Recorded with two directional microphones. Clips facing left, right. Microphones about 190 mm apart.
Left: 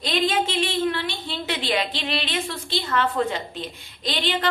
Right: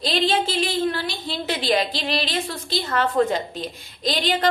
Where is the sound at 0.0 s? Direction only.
35° right (ahead or behind).